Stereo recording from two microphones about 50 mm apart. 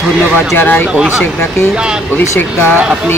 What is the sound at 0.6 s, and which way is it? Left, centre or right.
Speech, left.